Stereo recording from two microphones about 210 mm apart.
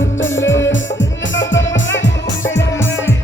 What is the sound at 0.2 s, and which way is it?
Music, 65° left (ahead or behind).